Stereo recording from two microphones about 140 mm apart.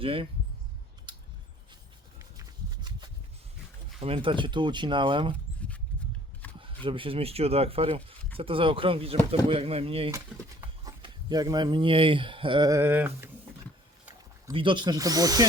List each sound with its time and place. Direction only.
0.0 s speech: 40° right (ahead or behind)
1.1 s scissors: 35° right (ahead or behind)
2.4 s a sound: 30° right (ahead or behind)
4.0 s speech: 40° right (ahead or behind)
6.6 s speech: 40° right (ahead or behind)
10.8 s speech: 30° right (ahead or behind)
12.8 s a sound: 15° right (ahead or behind)
14.5 s speech: 35° right (ahead or behind)